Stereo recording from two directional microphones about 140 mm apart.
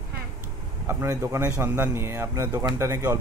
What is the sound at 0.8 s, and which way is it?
Speech, 20° right (ahead or behind).